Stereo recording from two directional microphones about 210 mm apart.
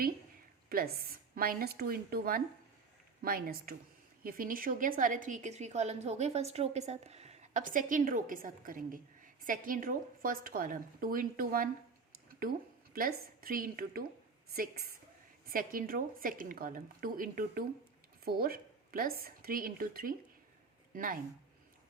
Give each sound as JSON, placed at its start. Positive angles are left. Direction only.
{"t": 0.7, "sound": "a woman's voice", "side_deg": -45}
{"t": 12.9, "sound": "a woman's voice", "side_deg": -45}